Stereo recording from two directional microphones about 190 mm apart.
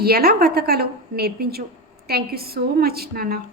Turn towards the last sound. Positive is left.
turn(degrees=-55)  # may be behind; listen again after turning